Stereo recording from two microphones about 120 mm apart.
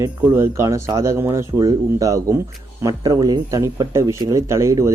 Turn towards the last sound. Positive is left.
turn(degrees=-25)  # may be behind; listen again after turning